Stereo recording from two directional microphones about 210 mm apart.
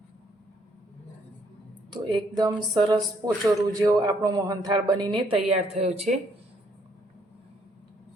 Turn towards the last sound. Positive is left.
turn(degrees=-30)  # may be behind; listen again after turning